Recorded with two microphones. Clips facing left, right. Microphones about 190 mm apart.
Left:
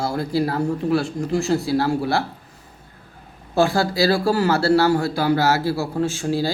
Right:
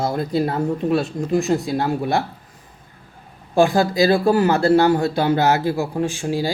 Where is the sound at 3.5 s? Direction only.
15° right (ahead or behind).